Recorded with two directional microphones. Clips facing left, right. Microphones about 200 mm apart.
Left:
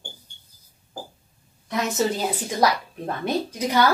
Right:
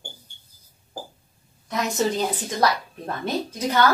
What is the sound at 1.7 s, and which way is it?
A woman's voice, 5° left (ahead or behind).